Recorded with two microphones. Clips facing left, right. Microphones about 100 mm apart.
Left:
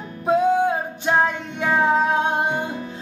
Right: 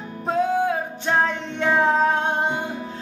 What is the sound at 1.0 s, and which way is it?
Music, 10° left (ahead or behind).